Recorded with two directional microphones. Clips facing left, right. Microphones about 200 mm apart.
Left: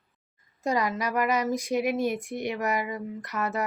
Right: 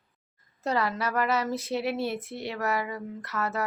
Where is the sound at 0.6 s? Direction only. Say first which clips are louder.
Left 1 dB; 10° left (ahead or behind).